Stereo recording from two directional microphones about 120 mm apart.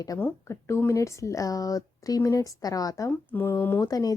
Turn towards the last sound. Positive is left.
turn(degrees=30)  # may be behind; listen again after turning